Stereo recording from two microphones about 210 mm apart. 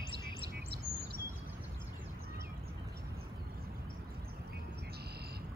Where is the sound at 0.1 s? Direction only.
50° right (ahead or behind).